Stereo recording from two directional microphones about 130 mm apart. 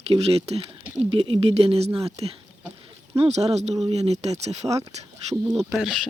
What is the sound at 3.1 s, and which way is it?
Speech, 55° right (ahead or behind).